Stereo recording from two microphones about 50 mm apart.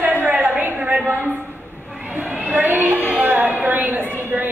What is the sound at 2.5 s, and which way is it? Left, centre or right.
A woman's voice, right.